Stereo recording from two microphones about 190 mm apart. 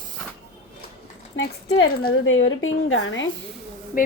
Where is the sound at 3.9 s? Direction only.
45° left (ahead or behind).